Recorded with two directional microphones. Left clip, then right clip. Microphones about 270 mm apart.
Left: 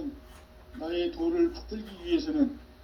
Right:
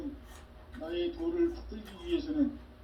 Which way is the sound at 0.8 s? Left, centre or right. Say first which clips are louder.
Left 4 dB; left.